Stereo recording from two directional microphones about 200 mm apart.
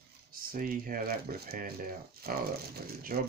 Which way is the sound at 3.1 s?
50° right (ahead or behind).